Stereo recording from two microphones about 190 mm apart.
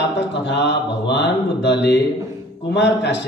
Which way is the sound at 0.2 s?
65° left (ahead or behind).